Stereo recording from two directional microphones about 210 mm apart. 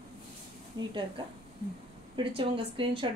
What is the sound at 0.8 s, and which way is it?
Speech, 20° right (ahead or behind).